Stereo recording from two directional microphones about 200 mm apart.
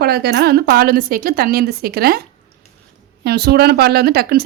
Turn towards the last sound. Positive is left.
turn(degrees=-50)  # may be behind; listen again after turning